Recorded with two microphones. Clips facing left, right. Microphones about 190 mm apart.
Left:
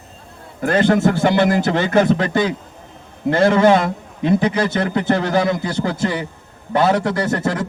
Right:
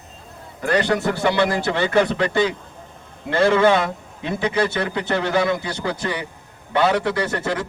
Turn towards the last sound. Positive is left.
turn(degrees=45)  # may be behind; listen again after turning